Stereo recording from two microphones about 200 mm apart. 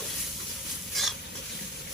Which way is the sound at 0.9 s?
Centre (ahead or behind).